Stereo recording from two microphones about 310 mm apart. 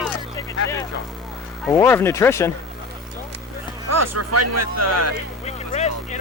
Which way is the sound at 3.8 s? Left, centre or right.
Right.